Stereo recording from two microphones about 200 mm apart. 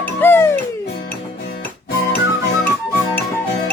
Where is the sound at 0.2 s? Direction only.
10° left (ahead or behind).